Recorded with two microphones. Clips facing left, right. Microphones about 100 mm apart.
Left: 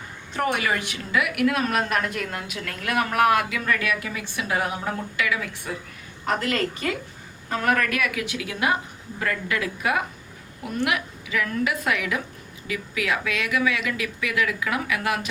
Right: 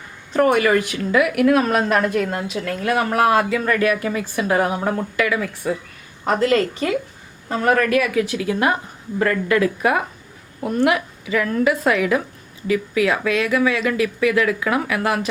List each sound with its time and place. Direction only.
0.3 s speech: 50° right (ahead or behind)
6.4 s a woman's voice: 25° right (ahead or behind)